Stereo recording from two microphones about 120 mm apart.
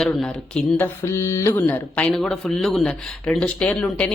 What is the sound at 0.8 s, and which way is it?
Mantra, 25° left (ahead or behind).